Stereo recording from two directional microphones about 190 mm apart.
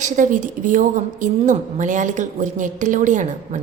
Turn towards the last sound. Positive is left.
turn(degrees=-40)  # may be behind; listen again after turning